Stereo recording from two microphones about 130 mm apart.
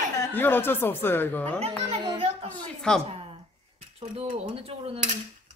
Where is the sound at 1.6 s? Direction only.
55° right (ahead or behind).